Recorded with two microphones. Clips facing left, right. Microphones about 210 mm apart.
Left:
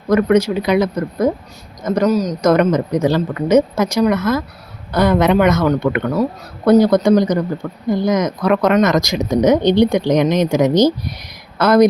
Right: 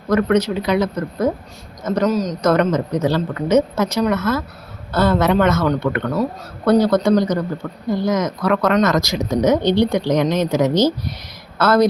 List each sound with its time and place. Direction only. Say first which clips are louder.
0.1 s speech: left 3 dB; 10° left (ahead or behind)
2.0 s a man's voice: left 3 dB; centre (ahead or behind)
2.4 s speech: left 2 dB; 10° left (ahead or behind)